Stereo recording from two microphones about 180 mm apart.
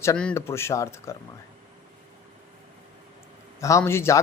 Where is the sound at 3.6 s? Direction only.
15° left (ahead or behind).